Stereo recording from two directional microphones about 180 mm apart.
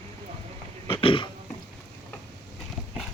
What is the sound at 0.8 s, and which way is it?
Burping, 30° left (ahead or behind).